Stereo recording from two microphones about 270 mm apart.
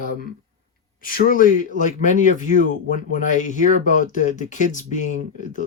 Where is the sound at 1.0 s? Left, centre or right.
Left.